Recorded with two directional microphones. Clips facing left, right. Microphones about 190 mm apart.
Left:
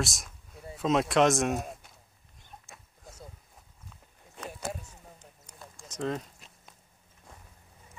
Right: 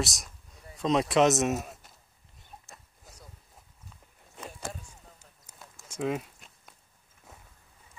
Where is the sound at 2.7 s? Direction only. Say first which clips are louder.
Even; centre (ahead or behind).